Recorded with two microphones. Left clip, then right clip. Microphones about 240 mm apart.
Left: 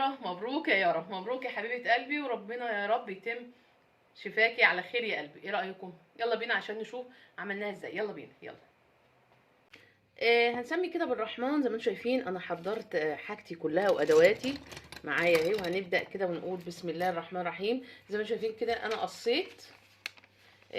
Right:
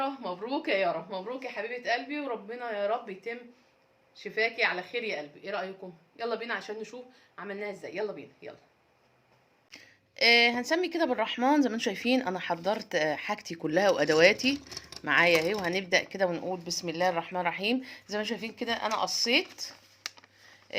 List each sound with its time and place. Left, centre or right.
0.0 s a woman's voice: centre
10.2 s speech: right